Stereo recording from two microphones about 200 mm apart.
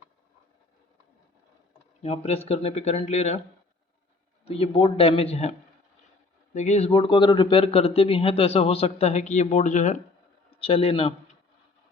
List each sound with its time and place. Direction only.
2.0 s speech: 30° left (ahead or behind)
4.4 s speech: 30° left (ahead or behind)